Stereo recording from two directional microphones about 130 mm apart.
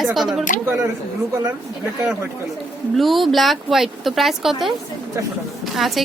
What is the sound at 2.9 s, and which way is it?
A woman's voice, centre (ahead or behind).